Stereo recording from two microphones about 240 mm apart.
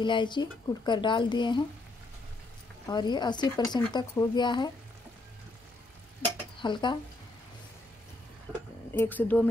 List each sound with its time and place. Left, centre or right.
0.0 s speech: centre
2.9 s speech: centre
6.6 s speech: centre
8.9 s speech: centre